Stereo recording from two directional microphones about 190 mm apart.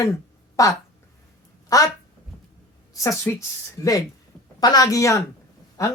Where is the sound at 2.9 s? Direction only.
15° left (ahead or behind).